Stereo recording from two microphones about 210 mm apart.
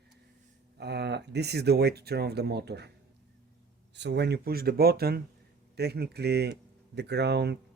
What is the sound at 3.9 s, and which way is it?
Speech, 55° right (ahead or behind).